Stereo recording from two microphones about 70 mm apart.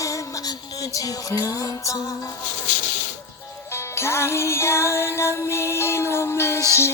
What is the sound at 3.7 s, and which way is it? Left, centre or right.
Music, left.